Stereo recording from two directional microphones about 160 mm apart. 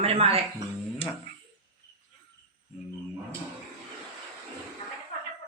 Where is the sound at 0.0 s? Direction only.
40° right (ahead or behind).